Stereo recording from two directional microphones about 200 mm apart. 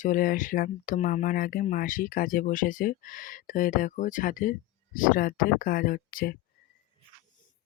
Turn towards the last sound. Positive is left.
turn(degrees=45)  # may be behind; listen again after turning